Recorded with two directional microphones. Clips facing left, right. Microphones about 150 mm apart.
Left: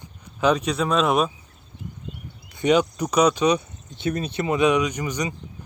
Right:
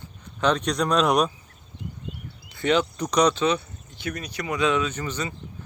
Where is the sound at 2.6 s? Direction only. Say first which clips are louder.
Left 3 dB; 15° left (ahead or behind).